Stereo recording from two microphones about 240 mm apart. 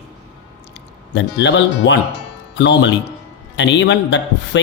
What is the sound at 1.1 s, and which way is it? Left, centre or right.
Speech, left.